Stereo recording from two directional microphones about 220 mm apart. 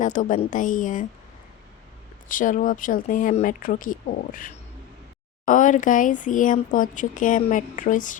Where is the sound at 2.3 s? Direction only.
35° left (ahead or behind).